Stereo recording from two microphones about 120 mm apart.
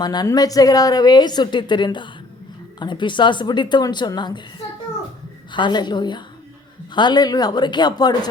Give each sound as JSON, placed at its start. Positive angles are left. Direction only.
{"t": 0.0, "sound": "a woman's voice", "side_deg": 35}
{"t": 5.5, "sound": "a woman's voice", "side_deg": 40}